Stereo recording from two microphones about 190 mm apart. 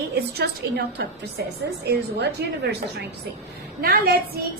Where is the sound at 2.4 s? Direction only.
60° right (ahead or behind).